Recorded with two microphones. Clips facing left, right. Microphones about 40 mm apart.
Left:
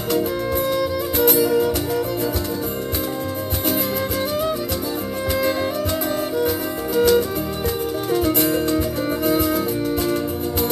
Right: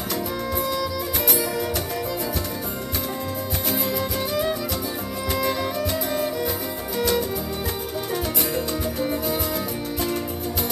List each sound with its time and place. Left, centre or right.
0.1 s music: left
5.4 s music: left
7.0 s music: left